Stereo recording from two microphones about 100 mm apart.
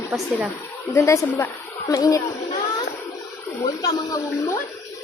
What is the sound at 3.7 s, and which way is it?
Speech, 35° left (ahead or behind).